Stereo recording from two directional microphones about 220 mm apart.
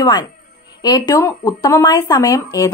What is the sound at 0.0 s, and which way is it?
A woman's voice, 20° left (ahead or behind).